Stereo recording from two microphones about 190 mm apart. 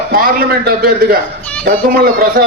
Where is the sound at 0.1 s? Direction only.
50° right (ahead or behind).